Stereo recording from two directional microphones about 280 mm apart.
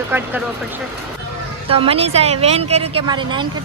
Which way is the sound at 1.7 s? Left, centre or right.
Centre.